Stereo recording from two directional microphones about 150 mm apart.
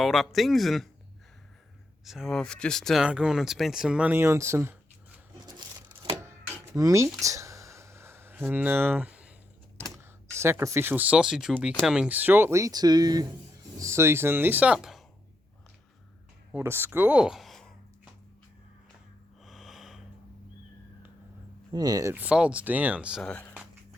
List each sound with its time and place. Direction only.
0.0 s speech: centre (ahead or behind)
2.0 s speech: centre (ahead or behind)
5.5 s a sound: 30° right (ahead or behind)
6.7 s a sound: 20° right (ahead or behind)
9.9 s speech: 20° right (ahead or behind); by 15.0 s 5° right (ahead or behind)
16.5 s speech: 15° right (ahead or behind); by 17.7 s 5° left (ahead or behind)
19.5 s snort: centre (ahead or behind)
21.7 s speech: 25° right (ahead or behind)
22.1 s speech: 10° right (ahead or behind)
23.2 s speech: 10° left (ahead or behind)